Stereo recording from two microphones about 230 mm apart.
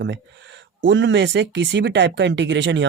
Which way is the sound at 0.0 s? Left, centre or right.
Right.